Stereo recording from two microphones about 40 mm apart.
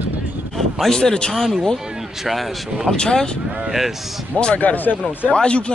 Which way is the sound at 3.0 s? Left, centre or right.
Centre.